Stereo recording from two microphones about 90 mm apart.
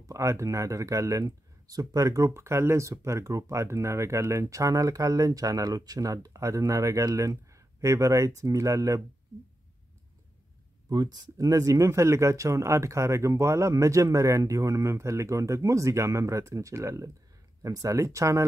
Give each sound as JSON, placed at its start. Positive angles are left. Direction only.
{"t": 0.0, "sound": "speech", "side_deg": -35}
{"t": 10.9, "sound": "speech", "side_deg": -50}